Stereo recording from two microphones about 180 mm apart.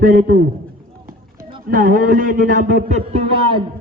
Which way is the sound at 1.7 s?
50° right (ahead or behind).